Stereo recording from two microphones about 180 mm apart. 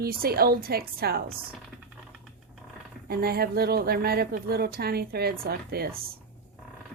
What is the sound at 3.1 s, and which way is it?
A woman's voice, 60° right (ahead or behind).